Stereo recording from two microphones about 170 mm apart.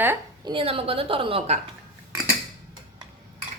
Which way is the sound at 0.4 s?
30° right (ahead or behind).